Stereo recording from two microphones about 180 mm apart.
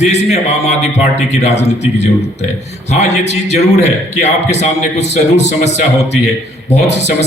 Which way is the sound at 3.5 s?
40° left (ahead or behind).